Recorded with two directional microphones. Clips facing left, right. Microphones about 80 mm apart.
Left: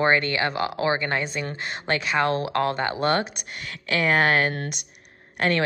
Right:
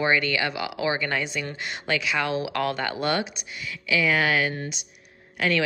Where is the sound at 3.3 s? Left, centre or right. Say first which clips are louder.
Even; left.